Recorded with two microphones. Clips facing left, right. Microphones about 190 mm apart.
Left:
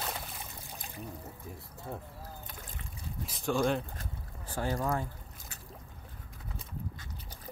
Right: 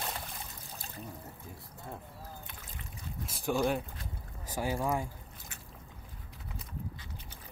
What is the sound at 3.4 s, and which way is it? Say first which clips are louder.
Speech: left 1 dB; 15° right (ahead or behind).